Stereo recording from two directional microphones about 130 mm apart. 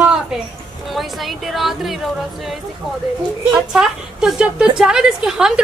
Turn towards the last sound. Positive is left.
turn(degrees=-5)  # may be behind; listen again after turning